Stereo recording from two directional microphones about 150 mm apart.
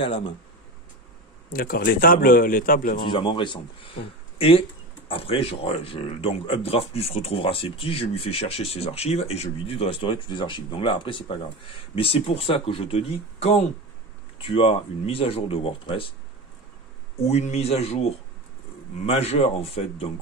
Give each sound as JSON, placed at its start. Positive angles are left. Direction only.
{"t": 1.5, "sound": "a man's voice", "side_deg": 80}
{"t": 3.1, "sound": "speech", "side_deg": 35}
{"t": 17.2, "sound": "a man's voice", "side_deg": 45}